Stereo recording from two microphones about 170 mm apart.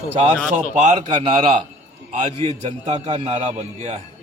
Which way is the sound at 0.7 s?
40° right (ahead or behind).